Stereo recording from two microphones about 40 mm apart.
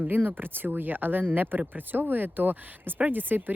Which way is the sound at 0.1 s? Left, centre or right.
Right.